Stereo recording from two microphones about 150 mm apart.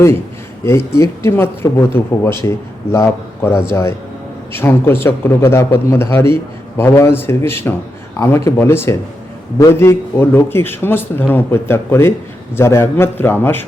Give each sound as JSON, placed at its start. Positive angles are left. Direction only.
{"t": 0.6, "sound": "speech", "side_deg": 20}